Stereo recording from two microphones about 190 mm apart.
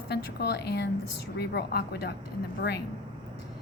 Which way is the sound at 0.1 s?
60° left (ahead or behind).